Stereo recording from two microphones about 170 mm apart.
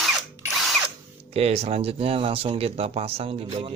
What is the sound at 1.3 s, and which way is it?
Speech, 35° right (ahead or behind).